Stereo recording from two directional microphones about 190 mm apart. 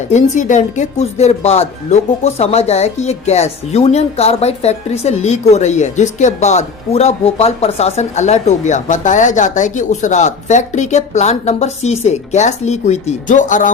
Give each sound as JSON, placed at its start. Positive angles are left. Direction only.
{"t": 0.1, "sound": "speech", "side_deg": 40}